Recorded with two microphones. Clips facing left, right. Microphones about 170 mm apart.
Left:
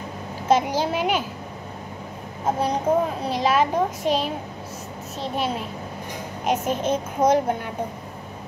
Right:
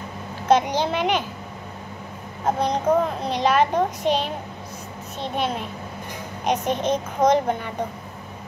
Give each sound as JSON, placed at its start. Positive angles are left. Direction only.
{"t": 0.5, "sound": "a woman's voice", "side_deg": 5}
{"t": 2.6, "sound": "a woman's voice", "side_deg": 10}
{"t": 6.4, "sound": "a woman's voice", "side_deg": 5}